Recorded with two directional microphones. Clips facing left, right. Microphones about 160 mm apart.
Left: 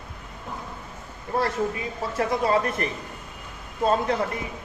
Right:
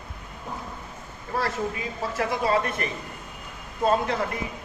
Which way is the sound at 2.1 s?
30° left (ahead or behind).